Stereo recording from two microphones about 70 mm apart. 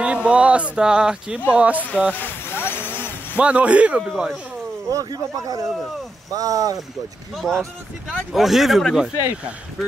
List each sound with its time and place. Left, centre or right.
0.0 s a man's voice: centre
1.8 s speech: left
2.1 s a sound: left
3.3 s a man's voice: centre
4.0 s speech: centre
4.8 s speech: right
7.3 s speech: centre